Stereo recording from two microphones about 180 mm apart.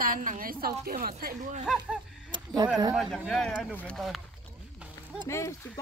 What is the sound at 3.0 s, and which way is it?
Speech, centre (ahead or behind).